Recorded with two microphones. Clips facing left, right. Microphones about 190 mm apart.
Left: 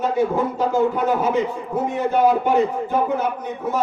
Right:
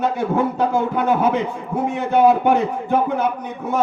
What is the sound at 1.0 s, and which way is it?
A man's voice, 65° right (ahead or behind).